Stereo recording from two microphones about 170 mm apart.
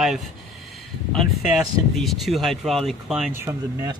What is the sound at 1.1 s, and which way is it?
Speech, centre (ahead or behind).